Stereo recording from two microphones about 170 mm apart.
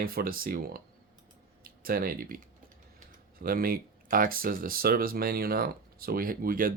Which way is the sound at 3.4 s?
60° right (ahead or behind).